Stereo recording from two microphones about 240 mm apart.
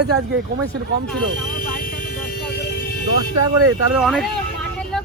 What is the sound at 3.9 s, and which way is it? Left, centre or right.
Speech, centre.